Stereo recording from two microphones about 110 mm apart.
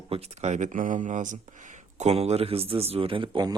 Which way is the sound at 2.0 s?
70° right (ahead or behind).